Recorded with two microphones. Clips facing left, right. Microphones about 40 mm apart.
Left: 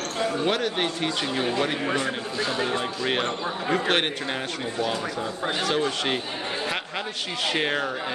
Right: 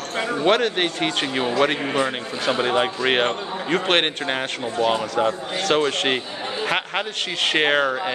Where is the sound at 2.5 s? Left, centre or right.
Right.